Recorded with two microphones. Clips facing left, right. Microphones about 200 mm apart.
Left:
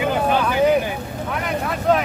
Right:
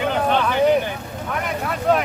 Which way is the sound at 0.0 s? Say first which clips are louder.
Left 1 dB; 5° left (ahead or behind).